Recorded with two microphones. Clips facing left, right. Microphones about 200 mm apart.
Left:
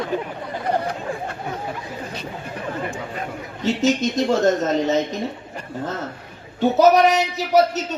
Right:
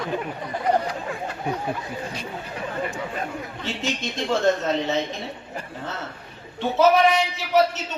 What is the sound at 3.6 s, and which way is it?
A man's voice, 40° left (ahead or behind).